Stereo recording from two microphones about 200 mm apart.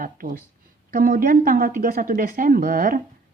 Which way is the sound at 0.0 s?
45° right (ahead or behind).